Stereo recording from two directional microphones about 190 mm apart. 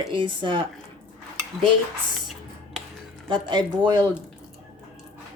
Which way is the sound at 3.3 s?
25° right (ahead or behind).